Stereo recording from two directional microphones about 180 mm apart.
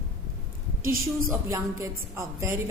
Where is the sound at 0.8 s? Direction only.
50° right (ahead or behind).